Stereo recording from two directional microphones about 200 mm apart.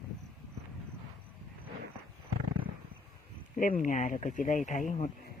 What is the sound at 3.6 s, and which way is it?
Speech, 40° left (ahead or behind).